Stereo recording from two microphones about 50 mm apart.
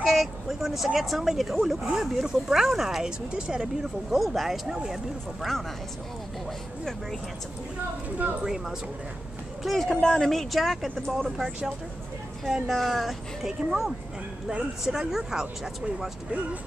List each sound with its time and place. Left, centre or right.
0.0 s speech: centre
3.8 s speech: centre
6.8 s speech: centre
9.6 s speech: centre
9.9 s speech: centre